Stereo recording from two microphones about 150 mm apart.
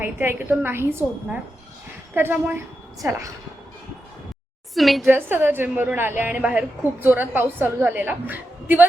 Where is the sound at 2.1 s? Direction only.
10° right (ahead or behind).